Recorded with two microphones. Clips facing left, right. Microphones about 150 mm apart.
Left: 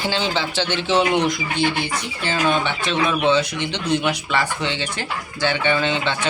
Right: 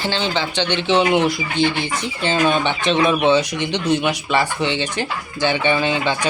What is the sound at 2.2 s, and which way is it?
Speech, 20° right (ahead or behind).